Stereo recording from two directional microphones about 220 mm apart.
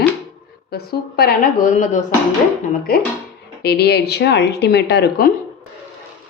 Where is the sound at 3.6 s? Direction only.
50° left (ahead or behind).